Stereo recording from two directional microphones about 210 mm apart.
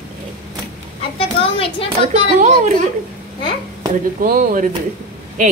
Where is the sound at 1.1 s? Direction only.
25° left (ahead or behind).